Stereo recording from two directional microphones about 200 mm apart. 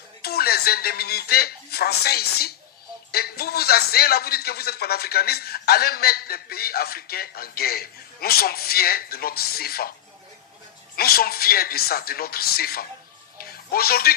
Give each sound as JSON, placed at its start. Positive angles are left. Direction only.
{"t": 0.2, "sound": "a man's voice", "side_deg": 50}
{"t": 10.9, "sound": "a man's voice", "side_deg": 50}
{"t": 13.4, "sound": "music", "side_deg": 50}